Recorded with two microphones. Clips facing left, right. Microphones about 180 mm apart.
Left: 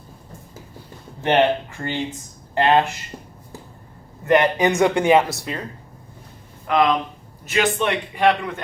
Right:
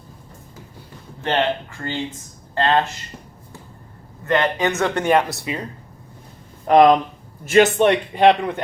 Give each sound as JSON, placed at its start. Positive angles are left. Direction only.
{"t": 1.2, "sound": "speech", "side_deg": 20}
{"t": 4.3, "sound": "speech", "side_deg": 15}
{"t": 6.7, "sound": "a man's voice", "side_deg": -40}
{"t": 7.8, "sound": "speech", "side_deg": -30}